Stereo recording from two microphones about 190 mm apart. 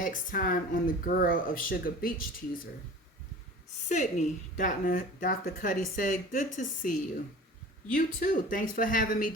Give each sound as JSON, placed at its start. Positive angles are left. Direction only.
{"t": 0.0, "sound": "speech", "side_deg": 45}
{"t": 3.8, "sound": "speech", "side_deg": 40}